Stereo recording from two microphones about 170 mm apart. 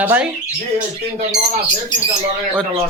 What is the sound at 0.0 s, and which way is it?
Speech, 10° right (ahead or behind).